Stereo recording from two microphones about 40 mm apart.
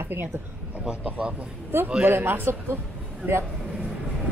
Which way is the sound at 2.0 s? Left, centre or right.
Right.